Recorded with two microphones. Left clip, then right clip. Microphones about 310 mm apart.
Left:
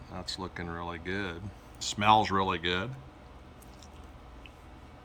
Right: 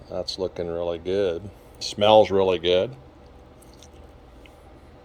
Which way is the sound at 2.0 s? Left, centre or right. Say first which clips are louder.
Right 8 dB; centre.